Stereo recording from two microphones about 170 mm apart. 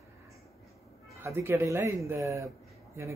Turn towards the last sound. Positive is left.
turn(degrees=-15)  # may be behind; listen again after turning